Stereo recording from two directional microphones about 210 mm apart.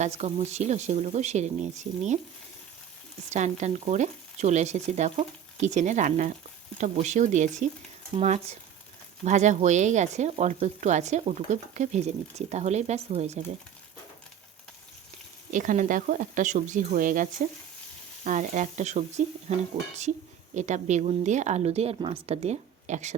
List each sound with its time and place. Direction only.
0.0 s speech: 30° right (ahead or behind)
3.2 s speech: 35° right (ahead or behind)
15.5 s speech: 40° right (ahead or behind)